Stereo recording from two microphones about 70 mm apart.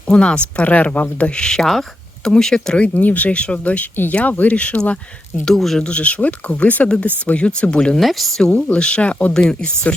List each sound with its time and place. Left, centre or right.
0.1 s speech: centre
2.8 s speech: left
5.5 s speech: centre
5.8 s speech: centre
7.9 s speech: centre
8.5 s speech: centre